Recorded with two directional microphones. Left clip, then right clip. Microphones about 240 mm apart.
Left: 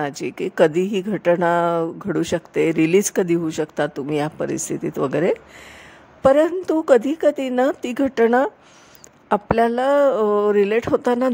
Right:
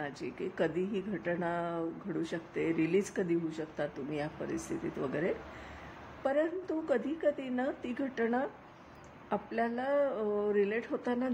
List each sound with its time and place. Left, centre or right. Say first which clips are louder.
0.0 s speech: left 14 dB; left